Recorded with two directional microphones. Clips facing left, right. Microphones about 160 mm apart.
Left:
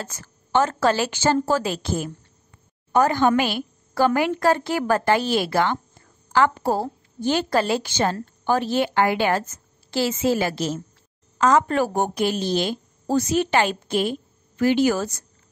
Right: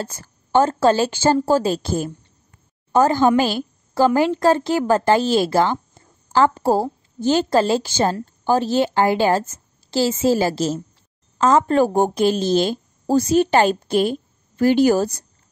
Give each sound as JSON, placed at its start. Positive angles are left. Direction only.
{"t": 0.0, "sound": "a woman's voice", "side_deg": -35}